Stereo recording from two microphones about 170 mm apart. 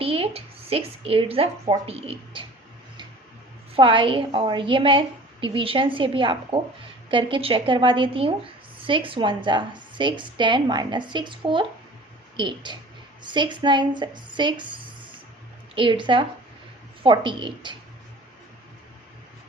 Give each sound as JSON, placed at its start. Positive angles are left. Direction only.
{"t": 0.0, "sound": "a sound", "side_deg": -35}
{"t": 1.9, "sound": "a woman's voice", "side_deg": -35}
{"t": 3.8, "sound": "a woman's voice", "side_deg": -30}
{"t": 15.7, "sound": "a woman's voice", "side_deg": -30}